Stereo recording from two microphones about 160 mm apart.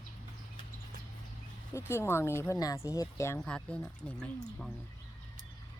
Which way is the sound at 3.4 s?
5° left (ahead or behind).